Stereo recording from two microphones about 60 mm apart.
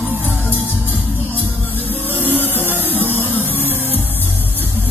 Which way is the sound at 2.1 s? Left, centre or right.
Left.